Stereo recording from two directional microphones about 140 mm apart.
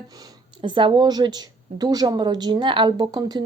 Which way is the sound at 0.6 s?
35° right (ahead or behind).